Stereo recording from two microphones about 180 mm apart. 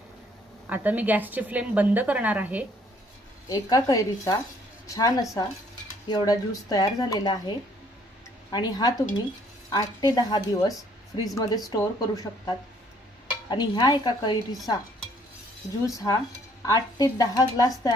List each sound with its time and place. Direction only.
0.7 s a woman's voice: 10° right (ahead or behind)
3.4 s speech: 20° left (ahead or behind)
15.9 s speech: 20° left (ahead or behind)